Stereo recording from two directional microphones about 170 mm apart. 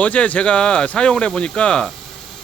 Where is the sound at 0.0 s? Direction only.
10° left (ahead or behind).